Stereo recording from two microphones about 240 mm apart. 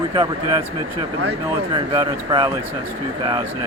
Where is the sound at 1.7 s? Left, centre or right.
Centre.